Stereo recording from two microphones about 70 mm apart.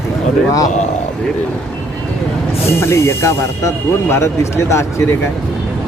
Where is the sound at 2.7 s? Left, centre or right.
Left.